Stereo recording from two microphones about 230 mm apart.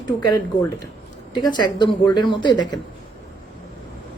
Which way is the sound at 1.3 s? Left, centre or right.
Centre.